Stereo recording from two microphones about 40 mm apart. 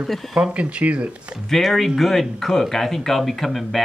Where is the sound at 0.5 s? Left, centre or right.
Right.